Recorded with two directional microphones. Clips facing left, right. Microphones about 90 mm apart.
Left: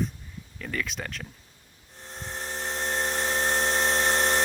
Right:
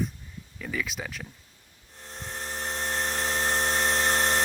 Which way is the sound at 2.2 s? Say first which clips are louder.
Left 1 dB; 15° left (ahead or behind).